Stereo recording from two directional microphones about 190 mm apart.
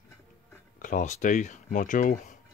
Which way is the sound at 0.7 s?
45° left (ahead or behind).